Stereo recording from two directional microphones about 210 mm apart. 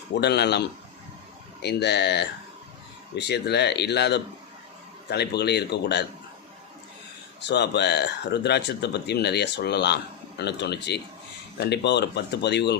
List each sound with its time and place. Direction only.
0.2 s speech: 50° left (ahead or behind)
1.6 s speech: 55° left (ahead or behind)
7.4 s speech: 55° left (ahead or behind)